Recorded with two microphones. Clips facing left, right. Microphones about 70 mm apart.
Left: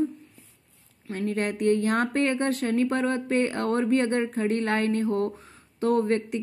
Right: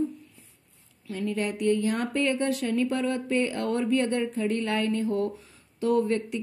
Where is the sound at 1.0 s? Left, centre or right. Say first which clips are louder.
Left 2 dB; left.